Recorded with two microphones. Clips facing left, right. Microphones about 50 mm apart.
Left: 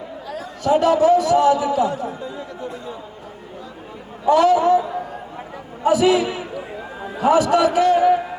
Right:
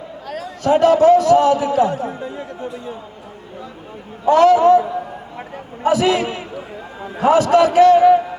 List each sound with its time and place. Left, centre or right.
0.3 s a man's voice: right
4.3 s a man's voice: right